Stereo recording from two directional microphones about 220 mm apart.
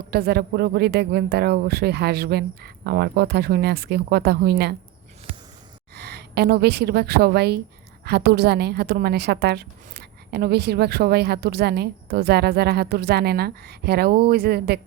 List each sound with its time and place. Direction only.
0.1 s a woman's voice: 45° right (ahead or behind)
5.9 s a woman's voice: 50° right (ahead or behind)